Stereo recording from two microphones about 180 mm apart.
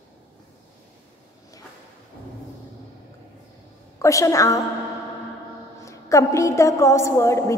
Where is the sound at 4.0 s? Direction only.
15° left (ahead or behind).